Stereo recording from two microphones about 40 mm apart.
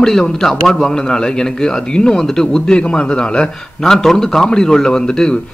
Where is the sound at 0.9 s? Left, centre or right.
Centre.